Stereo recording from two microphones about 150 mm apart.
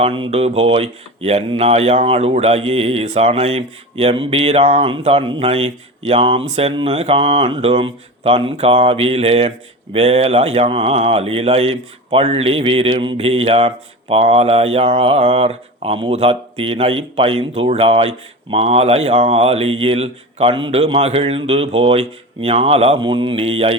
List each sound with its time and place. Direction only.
0.0 s speech: 40° right (ahead or behind)